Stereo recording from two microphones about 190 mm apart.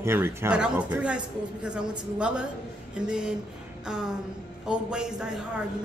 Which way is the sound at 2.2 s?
5° right (ahead or behind).